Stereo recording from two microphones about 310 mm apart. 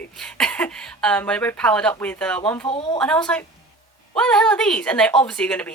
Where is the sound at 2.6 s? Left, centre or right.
Centre.